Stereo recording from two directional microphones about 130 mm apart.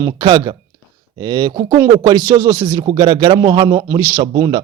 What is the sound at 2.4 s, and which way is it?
Speech, 20° right (ahead or behind).